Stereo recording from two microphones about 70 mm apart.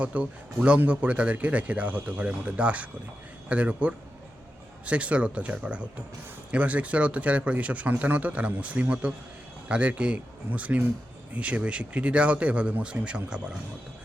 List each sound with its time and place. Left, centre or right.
0.0 s speech: centre